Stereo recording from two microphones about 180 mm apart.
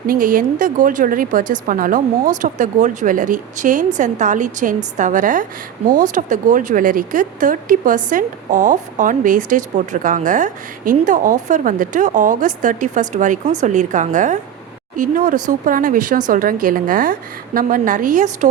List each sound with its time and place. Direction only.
0.1 s speech: 50° right (ahead or behind)